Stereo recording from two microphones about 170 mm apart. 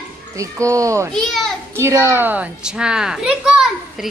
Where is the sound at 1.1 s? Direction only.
Centre (ahead or behind).